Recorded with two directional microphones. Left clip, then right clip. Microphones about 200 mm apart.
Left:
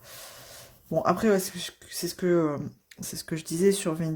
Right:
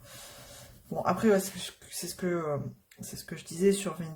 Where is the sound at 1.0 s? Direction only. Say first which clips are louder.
Left 1 dB; 45° left (ahead or behind).